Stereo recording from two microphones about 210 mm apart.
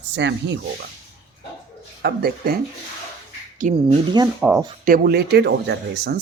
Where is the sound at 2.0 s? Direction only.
50° right (ahead or behind).